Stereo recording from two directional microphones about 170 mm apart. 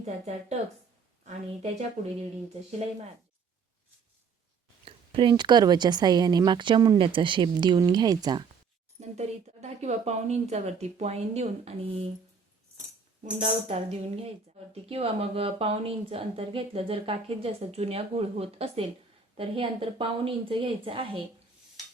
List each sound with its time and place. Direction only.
0.0 s speech: 40° right (ahead or behind)
4.9 s speech: 30° right (ahead or behind)
9.0 s speech: 40° right (ahead or behind)
13.4 s speech: 40° right (ahead or behind)